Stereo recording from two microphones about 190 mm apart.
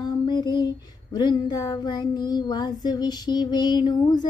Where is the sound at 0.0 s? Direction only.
20° left (ahead or behind).